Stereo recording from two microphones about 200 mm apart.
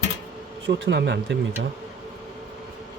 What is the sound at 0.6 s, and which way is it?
Speech, 65° right (ahead or behind).